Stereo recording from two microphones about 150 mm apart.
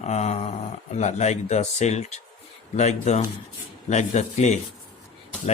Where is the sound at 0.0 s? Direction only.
50° left (ahead or behind).